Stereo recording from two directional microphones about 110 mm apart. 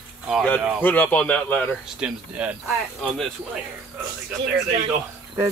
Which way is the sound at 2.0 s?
10° right (ahead or behind).